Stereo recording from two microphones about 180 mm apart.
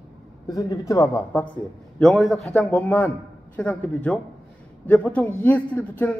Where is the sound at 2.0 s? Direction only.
Centre (ahead or behind).